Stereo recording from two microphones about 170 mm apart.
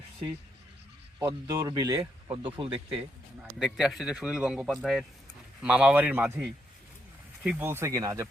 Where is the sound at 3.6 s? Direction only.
Centre (ahead or behind); by 8.3 s 20° right (ahead or behind).